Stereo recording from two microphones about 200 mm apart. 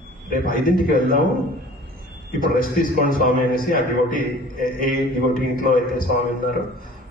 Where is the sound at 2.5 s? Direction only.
45° left (ahead or behind).